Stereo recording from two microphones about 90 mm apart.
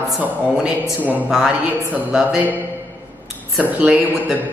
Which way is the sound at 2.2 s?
15° right (ahead or behind).